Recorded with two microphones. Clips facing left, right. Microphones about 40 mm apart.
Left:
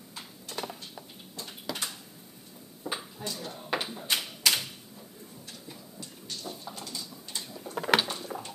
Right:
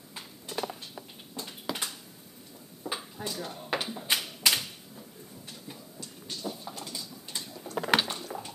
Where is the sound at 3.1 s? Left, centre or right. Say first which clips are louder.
Right 1 dB; centre.